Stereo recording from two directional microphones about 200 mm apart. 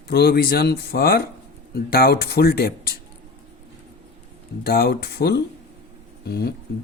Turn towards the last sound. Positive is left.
turn(degrees=50)  # may be behind; listen again after turning